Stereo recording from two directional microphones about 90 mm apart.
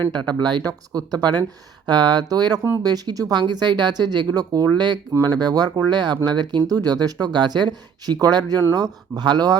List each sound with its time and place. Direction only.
0.1 s speech: 55° right (ahead or behind)